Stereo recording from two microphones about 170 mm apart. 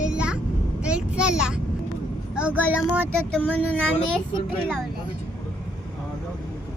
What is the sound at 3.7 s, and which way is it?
Speech, 10° left (ahead or behind).